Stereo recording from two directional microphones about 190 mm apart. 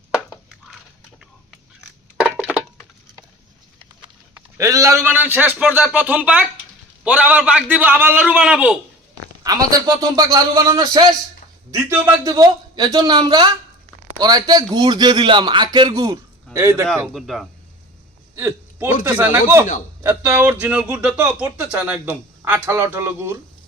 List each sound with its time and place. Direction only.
4.5 s a man's voice: 15° right (ahead or behind)
9.4 s a man's voice: 20° right (ahead or behind)
17.2 s speech: centre (ahead or behind)
18.3 s hiccup: 10° right (ahead or behind)
19.1 s a man's voice: 10° right (ahead or behind)